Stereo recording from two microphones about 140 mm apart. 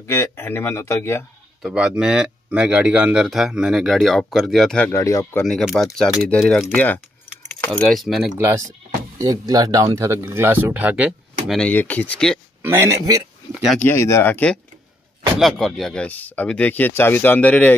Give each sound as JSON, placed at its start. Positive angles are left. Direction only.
{"t": 0.0, "sound": "speech", "side_deg": 20}
{"t": 1.6, "sound": "speech", "side_deg": -5}
{"t": 4.9, "sound": "speech", "side_deg": 20}
{"t": 5.4, "sound": "speech", "side_deg": 5}
{"t": 9.2, "sound": "speech", "side_deg": -25}
{"t": 11.7, "sound": "speech", "side_deg": 10}
{"t": 12.6, "sound": "speech", "side_deg": -20}
{"t": 13.7, "sound": "speech", "side_deg": 15}
{"t": 15.3, "sound": "speech", "side_deg": 0}